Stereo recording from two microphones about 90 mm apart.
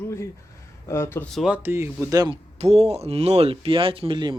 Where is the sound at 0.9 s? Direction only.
30° left (ahead or behind).